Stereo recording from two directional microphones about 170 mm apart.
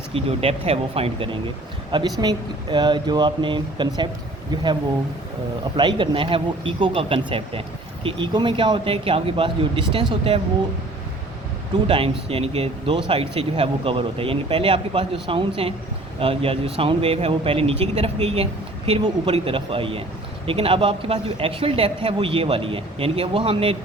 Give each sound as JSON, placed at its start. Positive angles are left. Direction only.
{"t": 0.1, "sound": "speech", "side_deg": -35}
{"t": 11.9, "sound": "speech", "side_deg": -35}